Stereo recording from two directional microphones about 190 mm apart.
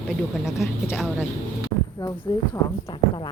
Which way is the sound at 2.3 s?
20° left (ahead or behind).